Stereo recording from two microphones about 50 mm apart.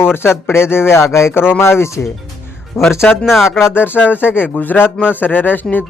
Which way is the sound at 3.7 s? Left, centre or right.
Left.